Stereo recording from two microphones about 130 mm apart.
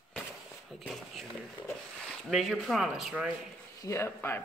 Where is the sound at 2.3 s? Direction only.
Centre (ahead or behind).